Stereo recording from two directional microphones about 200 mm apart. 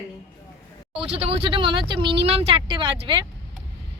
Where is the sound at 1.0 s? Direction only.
25° right (ahead or behind).